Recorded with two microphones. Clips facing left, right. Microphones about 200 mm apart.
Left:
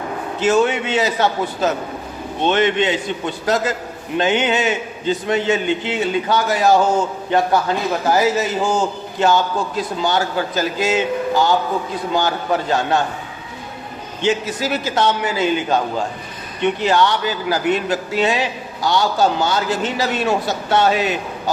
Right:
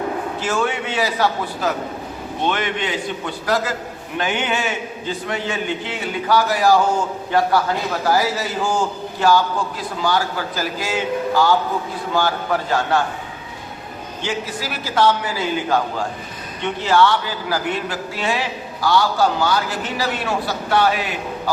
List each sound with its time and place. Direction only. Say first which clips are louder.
0.3 s a man's voice: left 9 dB; 20° left (ahead or behind)
14.2 s a man's voice: left 7 dB; 20° left (ahead or behind)